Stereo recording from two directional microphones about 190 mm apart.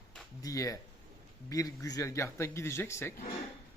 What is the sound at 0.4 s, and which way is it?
Speech, 15° left (ahead or behind).